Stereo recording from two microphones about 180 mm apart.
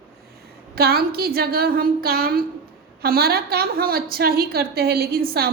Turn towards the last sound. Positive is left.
turn(degrees=-60)  # may be behind; listen again after turning